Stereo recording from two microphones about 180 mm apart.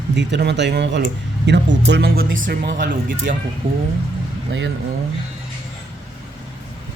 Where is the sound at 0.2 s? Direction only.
75° right (ahead or behind); by 3.3 s 50° right (ahead or behind).